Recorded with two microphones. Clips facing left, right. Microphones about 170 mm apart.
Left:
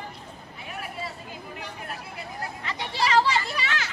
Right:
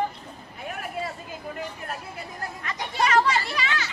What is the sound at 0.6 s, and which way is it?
Vehicle, 50° right (ahead or behind).